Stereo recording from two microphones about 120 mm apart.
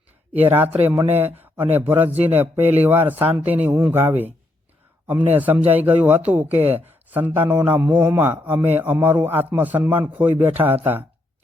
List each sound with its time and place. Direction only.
0.3 s a man's voice: 15° right (ahead or behind)